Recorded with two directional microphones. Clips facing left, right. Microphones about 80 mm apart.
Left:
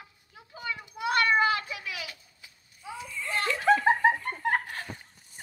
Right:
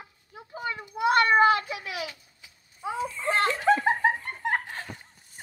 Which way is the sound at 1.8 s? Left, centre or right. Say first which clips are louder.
Right 4 dB; right.